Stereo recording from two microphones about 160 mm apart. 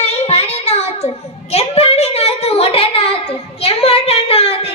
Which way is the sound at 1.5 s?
40° left (ahead or behind).